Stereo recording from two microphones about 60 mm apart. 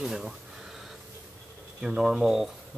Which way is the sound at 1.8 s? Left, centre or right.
Centre.